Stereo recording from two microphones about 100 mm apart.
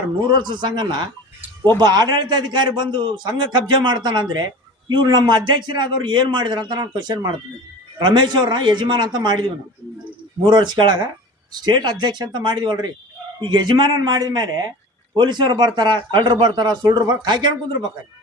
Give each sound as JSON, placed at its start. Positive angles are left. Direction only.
{"t": 0.3, "sound": "a man's voice", "side_deg": -50}